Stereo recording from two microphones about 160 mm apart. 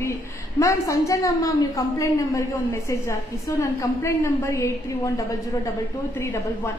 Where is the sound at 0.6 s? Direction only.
20° left (ahead or behind).